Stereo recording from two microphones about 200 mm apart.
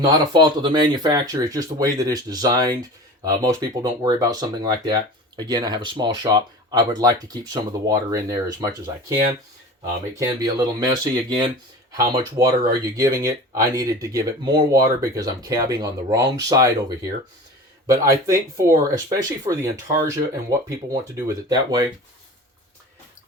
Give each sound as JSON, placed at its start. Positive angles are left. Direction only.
{"t": 0.0, "sound": "speech", "side_deg": -20}
{"t": 10.2, "sound": "speech", "side_deg": -20}
{"t": 17.8, "sound": "speech", "side_deg": -15}